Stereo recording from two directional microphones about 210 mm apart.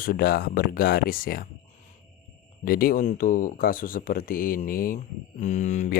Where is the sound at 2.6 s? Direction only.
45° left (ahead or behind).